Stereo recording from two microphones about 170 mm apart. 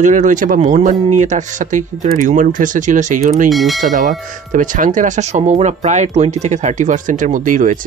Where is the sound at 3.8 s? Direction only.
50° right (ahead or behind).